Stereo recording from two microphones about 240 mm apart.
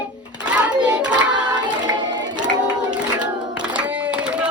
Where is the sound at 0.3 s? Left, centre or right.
Centre.